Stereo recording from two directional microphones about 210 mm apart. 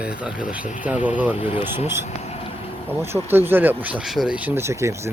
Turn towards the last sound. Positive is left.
turn(degrees=-15)  # may be behind; listen again after turning